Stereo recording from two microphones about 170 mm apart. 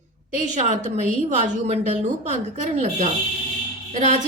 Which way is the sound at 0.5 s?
45° right (ahead or behind).